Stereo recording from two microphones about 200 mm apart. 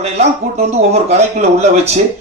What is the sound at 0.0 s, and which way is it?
Speech, 30° right (ahead or behind).